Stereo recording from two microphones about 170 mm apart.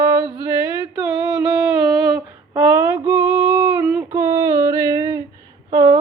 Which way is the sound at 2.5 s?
15° right (ahead or behind).